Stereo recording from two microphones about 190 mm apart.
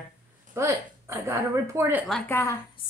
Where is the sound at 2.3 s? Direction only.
10° left (ahead or behind).